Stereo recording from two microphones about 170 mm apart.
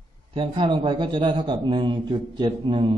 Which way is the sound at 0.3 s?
30° right (ahead or behind).